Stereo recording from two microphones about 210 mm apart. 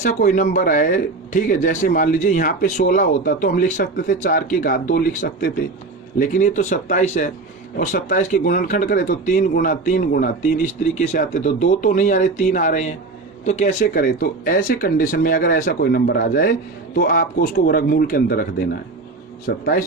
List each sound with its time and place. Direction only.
0.0 s a man's voice: 40° left (ahead or behind)
19.5 s speech: 45° left (ahead or behind)